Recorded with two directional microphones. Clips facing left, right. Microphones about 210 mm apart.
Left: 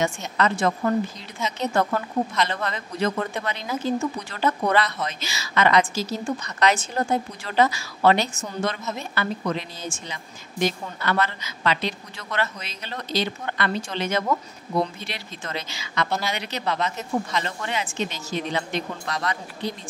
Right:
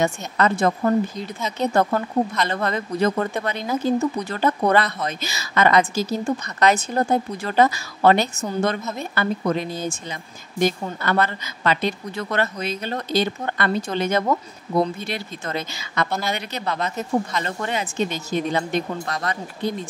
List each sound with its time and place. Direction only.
0.0 s a woman's voice: 40° right (ahead or behind)
17.5 s speech: 45° right (ahead or behind)